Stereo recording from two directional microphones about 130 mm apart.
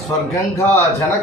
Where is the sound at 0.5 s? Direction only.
20° left (ahead or behind).